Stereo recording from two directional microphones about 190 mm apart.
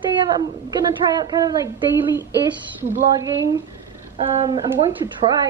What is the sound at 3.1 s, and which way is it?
A woman's voice, 20° right (ahead or behind).